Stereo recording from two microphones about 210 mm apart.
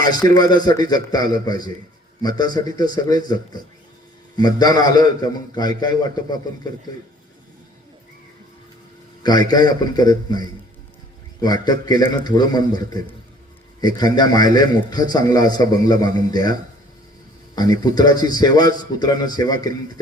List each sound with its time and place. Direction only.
0.2 s a man's voice: 15° left (ahead or behind)
9.2 s a man's voice: 20° left (ahead or behind)